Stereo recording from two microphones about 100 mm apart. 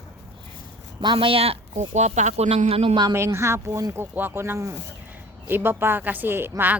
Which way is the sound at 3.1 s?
25° right (ahead or behind).